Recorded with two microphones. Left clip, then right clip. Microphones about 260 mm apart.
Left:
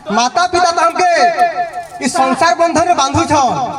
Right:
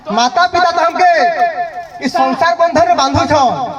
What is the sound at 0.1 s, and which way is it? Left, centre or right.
A man's voice, left.